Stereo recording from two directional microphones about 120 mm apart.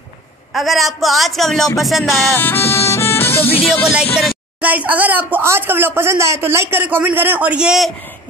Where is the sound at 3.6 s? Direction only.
10° left (ahead or behind).